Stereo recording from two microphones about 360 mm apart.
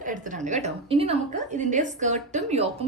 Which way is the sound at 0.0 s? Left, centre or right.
Right.